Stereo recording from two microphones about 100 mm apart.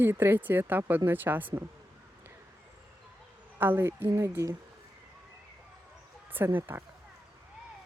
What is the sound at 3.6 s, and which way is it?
Speech, 20° right (ahead or behind).